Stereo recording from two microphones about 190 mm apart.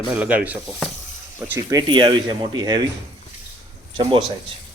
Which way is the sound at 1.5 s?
20° right (ahead or behind).